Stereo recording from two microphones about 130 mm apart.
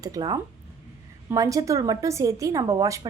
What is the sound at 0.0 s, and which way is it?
A woman's voice, 30° right (ahead or behind).